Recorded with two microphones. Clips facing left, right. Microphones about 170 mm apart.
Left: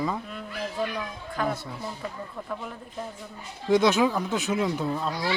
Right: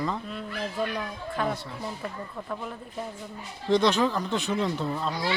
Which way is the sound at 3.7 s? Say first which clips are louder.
Left 2 dB; 5° left (ahead or behind).